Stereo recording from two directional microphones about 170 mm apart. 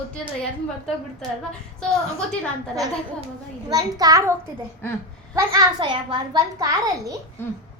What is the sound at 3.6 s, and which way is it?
Speech, 20° right (ahead or behind).